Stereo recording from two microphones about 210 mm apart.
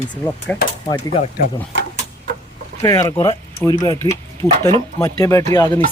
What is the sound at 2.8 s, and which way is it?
Speech, 15° left (ahead or behind).